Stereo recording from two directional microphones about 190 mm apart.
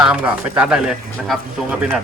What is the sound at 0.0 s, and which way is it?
Speech, 5° right (ahead or behind).